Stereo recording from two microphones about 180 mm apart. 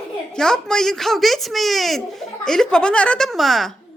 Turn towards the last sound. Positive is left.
turn(degrees=0)  # may be behind; listen again after turning